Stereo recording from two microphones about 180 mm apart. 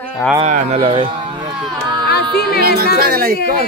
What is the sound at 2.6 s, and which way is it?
Speech, 55° right (ahead or behind).